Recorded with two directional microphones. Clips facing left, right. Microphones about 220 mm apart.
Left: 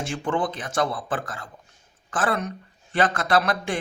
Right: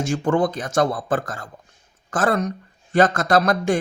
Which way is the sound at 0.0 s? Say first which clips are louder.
Right 6 dB; 45° right (ahead or behind).